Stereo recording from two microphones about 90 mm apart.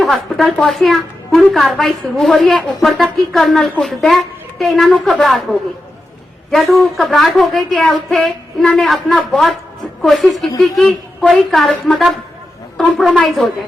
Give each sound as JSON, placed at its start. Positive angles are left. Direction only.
{"t": 0.0, "sound": "a woman's voice", "side_deg": 0}
{"t": 12.7, "sound": "a woman's voice", "side_deg": 5}